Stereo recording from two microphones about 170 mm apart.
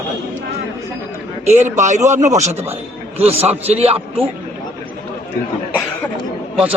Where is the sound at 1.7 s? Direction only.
45° right (ahead or behind).